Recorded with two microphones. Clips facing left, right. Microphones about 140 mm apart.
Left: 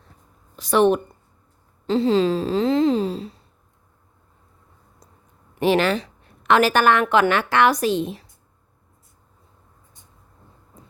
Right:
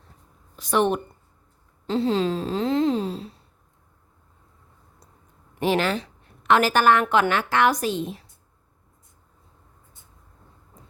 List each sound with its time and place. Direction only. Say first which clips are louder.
0.6 s speech: left 5 dB; 90° left
5.5 s a woman's voice: left 4 dB; 80° left